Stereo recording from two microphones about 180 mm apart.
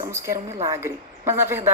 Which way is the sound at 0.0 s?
15° right (ahead or behind).